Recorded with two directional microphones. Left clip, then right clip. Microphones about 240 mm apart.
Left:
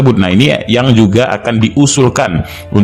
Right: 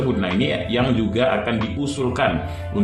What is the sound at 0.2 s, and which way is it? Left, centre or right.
A man's voice, left.